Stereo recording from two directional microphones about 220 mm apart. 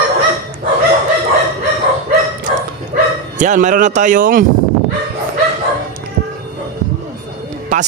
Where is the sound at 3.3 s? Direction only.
35° right (ahead or behind).